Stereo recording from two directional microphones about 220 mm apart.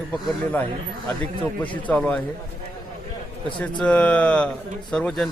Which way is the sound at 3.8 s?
5° left (ahead or behind).